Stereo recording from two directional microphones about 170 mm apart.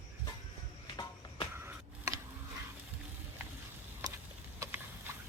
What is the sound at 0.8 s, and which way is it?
Music, 25° left (ahead or behind).